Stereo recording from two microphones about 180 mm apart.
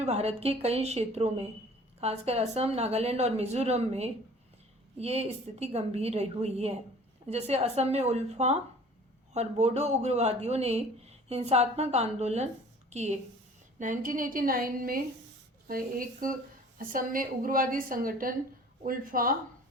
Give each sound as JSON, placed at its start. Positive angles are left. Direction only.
{"t": 0.0, "sound": "a woman's voice", "side_deg": -35}